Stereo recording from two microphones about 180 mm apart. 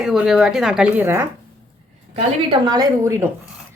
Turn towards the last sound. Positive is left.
turn(degrees=-15)  # may be behind; listen again after turning